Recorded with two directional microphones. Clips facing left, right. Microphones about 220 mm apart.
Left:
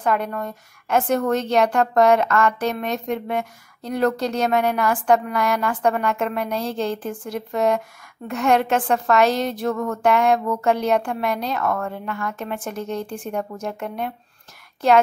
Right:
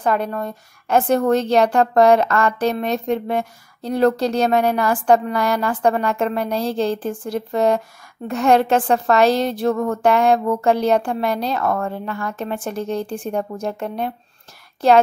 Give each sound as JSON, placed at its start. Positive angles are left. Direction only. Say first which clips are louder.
{"t": 0.0, "sound": "a woman's voice", "louder": "right 2 dB", "side_deg": -35}